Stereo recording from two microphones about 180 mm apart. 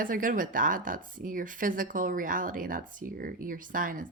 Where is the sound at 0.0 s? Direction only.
50° right (ahead or behind).